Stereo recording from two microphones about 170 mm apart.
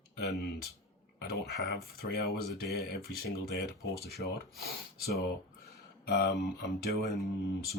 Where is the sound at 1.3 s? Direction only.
75° left (ahead or behind).